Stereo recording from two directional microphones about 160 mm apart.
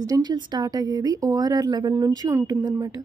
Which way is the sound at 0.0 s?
25° right (ahead or behind).